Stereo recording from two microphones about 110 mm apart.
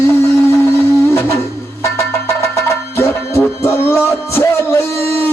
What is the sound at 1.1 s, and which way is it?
Music, 25° left (ahead or behind).